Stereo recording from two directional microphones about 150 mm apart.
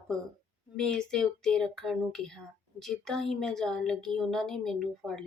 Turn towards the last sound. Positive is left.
turn(degrees=5)  # may be behind; listen again after turning